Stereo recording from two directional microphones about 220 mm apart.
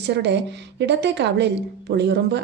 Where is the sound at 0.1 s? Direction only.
50° right (ahead or behind).